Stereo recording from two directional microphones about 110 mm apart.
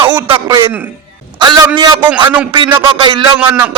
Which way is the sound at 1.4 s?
45° right (ahead or behind).